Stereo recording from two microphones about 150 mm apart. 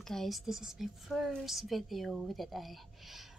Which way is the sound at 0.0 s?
Centre (ahead or behind).